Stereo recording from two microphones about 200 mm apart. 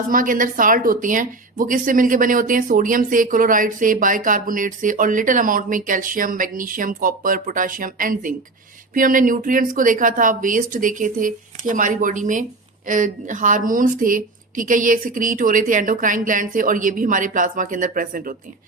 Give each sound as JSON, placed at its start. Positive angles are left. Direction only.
{"t": 0.1, "sound": "a woman's voice", "side_deg": -45}